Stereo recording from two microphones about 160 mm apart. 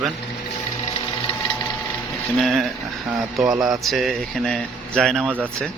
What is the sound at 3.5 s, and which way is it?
Speech, 20° right (ahead or behind).